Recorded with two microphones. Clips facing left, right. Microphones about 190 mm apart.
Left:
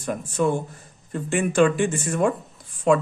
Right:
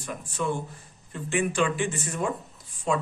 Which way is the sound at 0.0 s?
50° left (ahead or behind).